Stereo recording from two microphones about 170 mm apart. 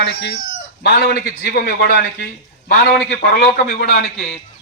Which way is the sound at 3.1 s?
65° left (ahead or behind).